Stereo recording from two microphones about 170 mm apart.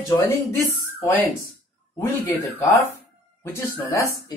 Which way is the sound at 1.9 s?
20° left (ahead or behind).